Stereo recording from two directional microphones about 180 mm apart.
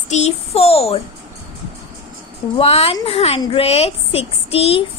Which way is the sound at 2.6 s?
35° left (ahead or behind).